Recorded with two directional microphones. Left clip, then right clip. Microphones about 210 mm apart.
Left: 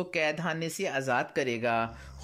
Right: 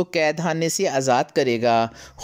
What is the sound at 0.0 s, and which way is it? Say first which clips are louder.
Speech: right 8 dB; 25° right (ahead or behind).